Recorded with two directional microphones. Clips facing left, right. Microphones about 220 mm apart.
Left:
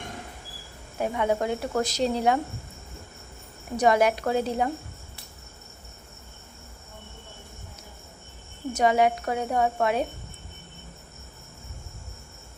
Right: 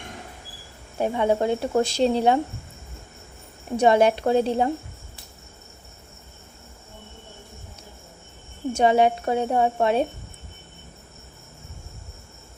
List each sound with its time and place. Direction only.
0.9 s speech: 30° right (ahead or behind)
3.8 s speech: 30° right (ahead or behind)
8.7 s speech: 30° right (ahead or behind)